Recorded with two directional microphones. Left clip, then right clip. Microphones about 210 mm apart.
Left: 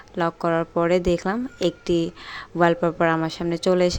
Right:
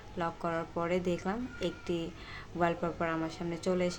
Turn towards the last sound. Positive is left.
turn(degrees=40)  # may be behind; listen again after turning